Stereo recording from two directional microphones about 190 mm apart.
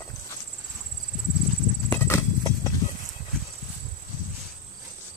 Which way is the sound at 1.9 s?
15° left (ahead or behind).